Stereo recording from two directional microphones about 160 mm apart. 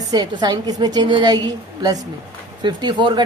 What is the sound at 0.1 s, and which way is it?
A woman's voice, 25° right (ahead or behind).